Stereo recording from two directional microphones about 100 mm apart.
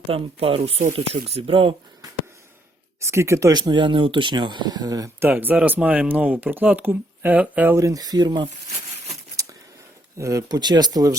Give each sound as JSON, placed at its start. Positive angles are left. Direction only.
{"t": 0.1, "sound": "speech", "side_deg": -70}
{"t": 3.1, "sound": "speech", "side_deg": -30}
{"t": 3.5, "sound": "speech", "side_deg": -50}
{"t": 5.0, "sound": "speech", "side_deg": -20}
{"t": 7.8, "sound": "speech", "side_deg": -35}
{"t": 9.3, "sound": "a sound", "side_deg": -35}
{"t": 10.2, "sound": "speech", "side_deg": -35}